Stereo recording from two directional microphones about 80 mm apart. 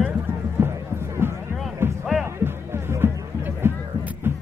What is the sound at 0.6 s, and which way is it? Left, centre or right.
Music, right.